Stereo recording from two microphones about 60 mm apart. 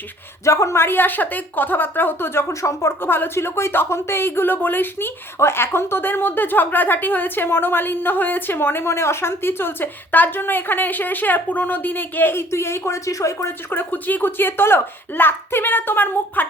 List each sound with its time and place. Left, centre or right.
0.4 s speech: left
0.8 s a woman's voice: left
2.5 s speech: left
3.0 s a woman's voice: left
13.1 s speech: left
13.7 s a woman's voice: left